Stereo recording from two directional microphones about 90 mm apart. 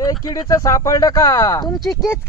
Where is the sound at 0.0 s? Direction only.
45° left (ahead or behind).